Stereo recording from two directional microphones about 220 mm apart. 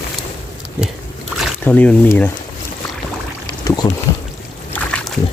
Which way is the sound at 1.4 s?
5° left (ahead or behind).